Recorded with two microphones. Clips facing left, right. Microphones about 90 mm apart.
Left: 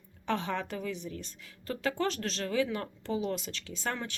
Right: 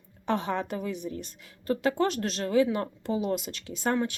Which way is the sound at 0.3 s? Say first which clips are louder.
Right 4 dB; 15° right (ahead or behind).